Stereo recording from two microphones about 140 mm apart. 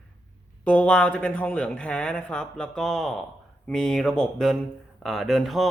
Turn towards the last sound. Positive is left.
turn(degrees=0)  # may be behind; listen again after turning